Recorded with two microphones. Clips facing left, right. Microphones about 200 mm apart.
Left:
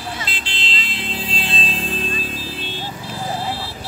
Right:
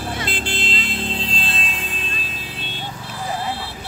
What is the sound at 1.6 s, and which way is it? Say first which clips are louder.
Music: left 4 dB; 30° left (ahead or behind).